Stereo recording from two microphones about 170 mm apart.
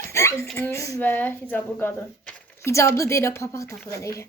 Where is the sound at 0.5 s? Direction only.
15° left (ahead or behind).